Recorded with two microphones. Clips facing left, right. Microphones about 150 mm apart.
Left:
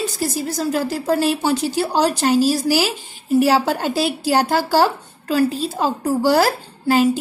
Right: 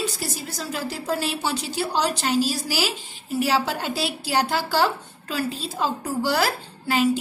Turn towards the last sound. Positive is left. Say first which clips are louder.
# left 6 dB
turn(degrees=40)  # may be behind; listen again after turning